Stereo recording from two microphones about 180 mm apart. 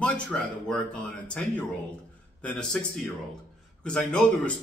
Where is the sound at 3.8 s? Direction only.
5° left (ahead or behind).